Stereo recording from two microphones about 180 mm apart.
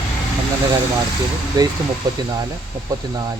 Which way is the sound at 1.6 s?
20° right (ahead or behind).